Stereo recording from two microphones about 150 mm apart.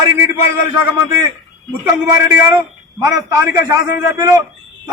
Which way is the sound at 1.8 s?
15° right (ahead or behind).